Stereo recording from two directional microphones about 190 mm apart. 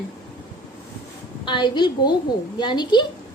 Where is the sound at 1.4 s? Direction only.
25° left (ahead or behind).